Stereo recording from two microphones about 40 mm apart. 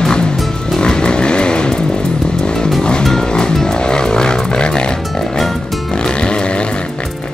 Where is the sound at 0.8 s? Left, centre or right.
Left.